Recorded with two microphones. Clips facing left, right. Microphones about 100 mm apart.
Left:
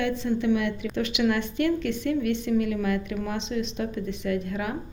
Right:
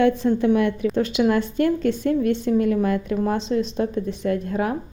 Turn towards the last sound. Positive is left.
turn(degrees=-35)  # may be behind; listen again after turning